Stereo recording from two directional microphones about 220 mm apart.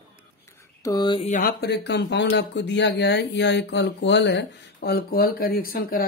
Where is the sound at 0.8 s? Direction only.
15° left (ahead or behind).